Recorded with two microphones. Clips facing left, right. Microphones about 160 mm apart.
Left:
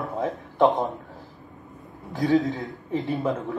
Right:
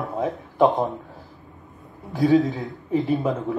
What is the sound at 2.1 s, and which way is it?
A man's voice, centre (ahead or behind).